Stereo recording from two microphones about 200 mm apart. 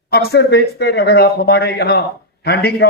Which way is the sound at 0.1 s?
55° left (ahead or behind).